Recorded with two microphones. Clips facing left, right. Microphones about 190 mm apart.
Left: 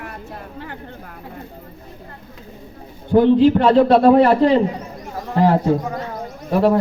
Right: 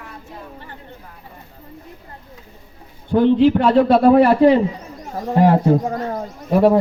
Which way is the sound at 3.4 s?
5° right (ahead or behind).